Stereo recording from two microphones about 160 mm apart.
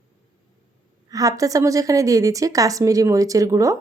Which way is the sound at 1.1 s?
20° right (ahead or behind).